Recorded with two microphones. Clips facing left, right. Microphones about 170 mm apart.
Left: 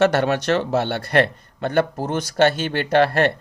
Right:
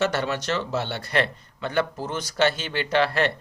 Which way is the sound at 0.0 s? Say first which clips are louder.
Left 7 dB; 60° left (ahead or behind).